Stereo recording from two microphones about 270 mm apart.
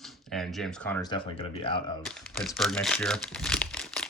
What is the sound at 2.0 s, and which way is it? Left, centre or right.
Crumpling, centre.